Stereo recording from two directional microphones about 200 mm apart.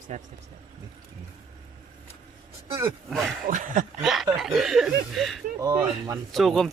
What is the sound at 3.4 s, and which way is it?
Speech, 40° right (ahead or behind).